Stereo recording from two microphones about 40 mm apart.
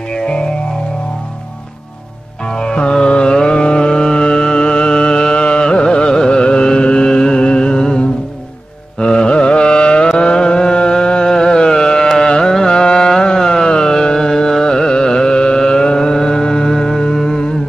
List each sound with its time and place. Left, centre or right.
0.1 s music: left
2.4 s music: centre
9.0 s carnatic music: left